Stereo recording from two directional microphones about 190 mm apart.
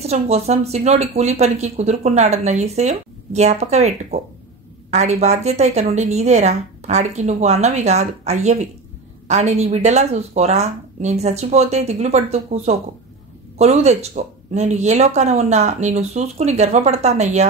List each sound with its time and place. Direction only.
0.0 s speech: 35° right (ahead or behind)